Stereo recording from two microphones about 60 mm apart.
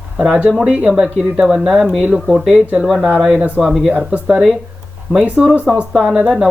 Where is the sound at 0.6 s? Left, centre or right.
Centre.